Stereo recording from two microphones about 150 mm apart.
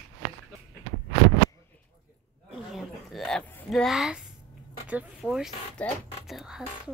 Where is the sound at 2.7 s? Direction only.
Centre (ahead or behind).